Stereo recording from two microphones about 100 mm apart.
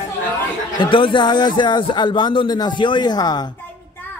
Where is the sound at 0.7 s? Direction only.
55° left (ahead or behind).